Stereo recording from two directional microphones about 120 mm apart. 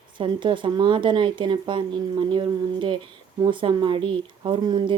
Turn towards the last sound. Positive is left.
turn(degrees=-45)  # may be behind; listen again after turning